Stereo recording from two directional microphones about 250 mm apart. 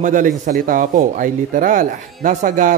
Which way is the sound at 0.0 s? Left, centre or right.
Right.